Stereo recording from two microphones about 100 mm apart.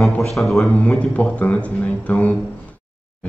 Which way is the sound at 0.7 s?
15° left (ahead or behind).